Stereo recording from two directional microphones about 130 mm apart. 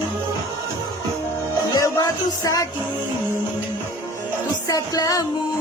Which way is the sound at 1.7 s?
30° left (ahead or behind).